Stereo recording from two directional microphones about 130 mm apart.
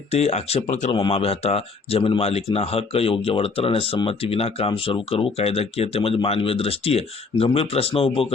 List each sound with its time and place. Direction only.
0.1 s speech: 55° left (ahead or behind)